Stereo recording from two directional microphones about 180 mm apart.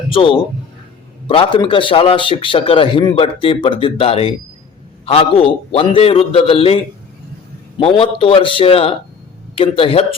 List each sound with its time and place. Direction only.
0.1 s a man's voice: 30° left (ahead or behind)
7.8 s a man's voice: 30° left (ahead or behind)